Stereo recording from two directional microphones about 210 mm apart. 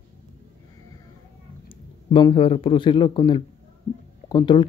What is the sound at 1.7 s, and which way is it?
A man's voice, 20° left (ahead or behind).